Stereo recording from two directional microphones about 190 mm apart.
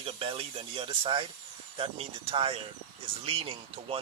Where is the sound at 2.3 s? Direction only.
30° right (ahead or behind).